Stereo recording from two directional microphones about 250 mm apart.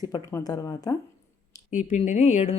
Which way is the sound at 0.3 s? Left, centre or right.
Centre.